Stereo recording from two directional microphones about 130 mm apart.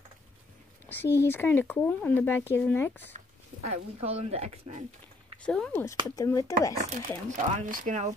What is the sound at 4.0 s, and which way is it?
Speech, 50° right (ahead or behind).